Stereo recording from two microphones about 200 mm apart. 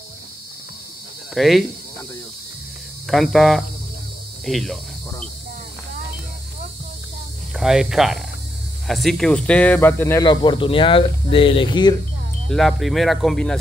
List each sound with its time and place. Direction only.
1.3 s speech: centre (ahead or behind)
3.1 s speech: centre (ahead or behind)
7.5 s speech: centre (ahead or behind); by 11.9 s 25° left (ahead or behind)
12.4 s speech: centre (ahead or behind)